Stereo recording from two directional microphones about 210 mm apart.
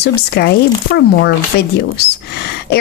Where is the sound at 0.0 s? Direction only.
50° left (ahead or behind).